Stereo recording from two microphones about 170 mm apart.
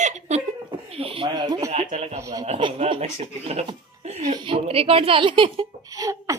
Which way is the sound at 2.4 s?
35° right (ahead or behind).